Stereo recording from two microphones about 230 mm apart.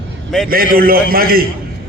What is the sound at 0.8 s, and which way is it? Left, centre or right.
Speech, right.